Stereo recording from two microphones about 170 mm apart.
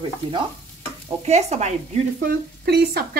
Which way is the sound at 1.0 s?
40° right (ahead or behind).